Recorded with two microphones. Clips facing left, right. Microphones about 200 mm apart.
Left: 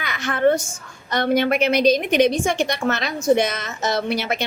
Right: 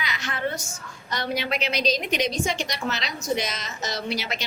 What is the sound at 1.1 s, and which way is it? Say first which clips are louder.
A woman's voice: left 9 dB; 55° left (ahead or behind).